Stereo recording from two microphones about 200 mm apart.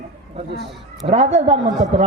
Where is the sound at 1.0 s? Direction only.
35° right (ahead or behind).